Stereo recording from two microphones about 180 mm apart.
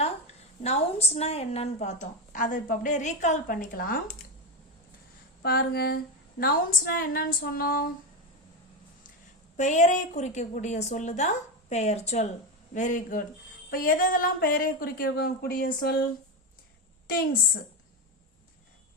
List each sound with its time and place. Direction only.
0.6 s a woman's voice: 35° left (ahead or behind); by 4.2 s 55° left (ahead or behind)
5.4 s speech: 60° left (ahead or behind)
9.6 s a woman's voice: 40° left (ahead or behind)
15.0 s speech: 75° left (ahead or behind)
15.3 s speech: 55° left (ahead or behind)